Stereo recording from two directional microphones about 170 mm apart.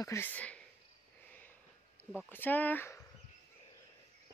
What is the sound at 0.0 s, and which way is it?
Speech, 15° left (ahead or behind).